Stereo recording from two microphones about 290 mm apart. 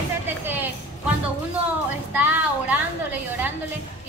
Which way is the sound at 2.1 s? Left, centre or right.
Centre.